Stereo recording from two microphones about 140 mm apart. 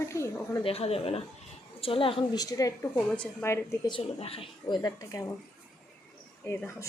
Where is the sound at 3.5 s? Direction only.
20° left (ahead or behind).